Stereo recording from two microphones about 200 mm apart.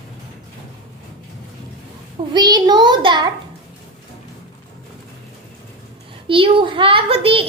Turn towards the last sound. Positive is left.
turn(degrees=-30)  # may be behind; listen again after turning